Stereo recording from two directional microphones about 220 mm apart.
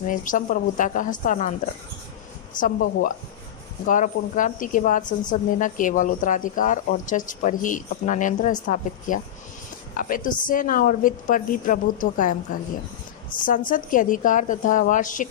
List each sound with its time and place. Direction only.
0.0 s speech: 35° left (ahead or behind)
2.6 s speech: 35° left (ahead or behind)
13.7 s speech: 40° left (ahead or behind)